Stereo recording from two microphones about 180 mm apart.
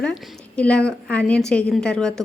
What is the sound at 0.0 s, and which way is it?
A woman's voice, 5° left (ahead or behind).